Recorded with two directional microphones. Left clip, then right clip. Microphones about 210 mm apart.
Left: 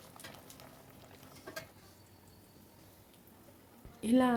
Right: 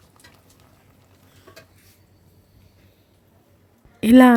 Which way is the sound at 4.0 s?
45° right (ahead or behind).